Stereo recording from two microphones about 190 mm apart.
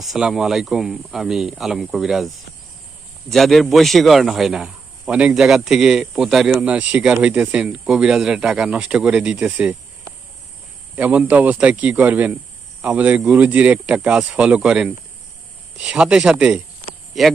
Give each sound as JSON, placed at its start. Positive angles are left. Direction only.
{"t": 0.0, "sound": "a man's voice", "side_deg": 0}
{"t": 10.9, "sound": "a man's voice", "side_deg": -10}